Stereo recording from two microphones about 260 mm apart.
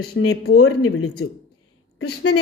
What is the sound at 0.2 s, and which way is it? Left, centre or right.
Speech, left.